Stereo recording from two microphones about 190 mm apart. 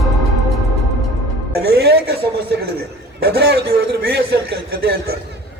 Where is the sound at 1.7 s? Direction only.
55° right (ahead or behind).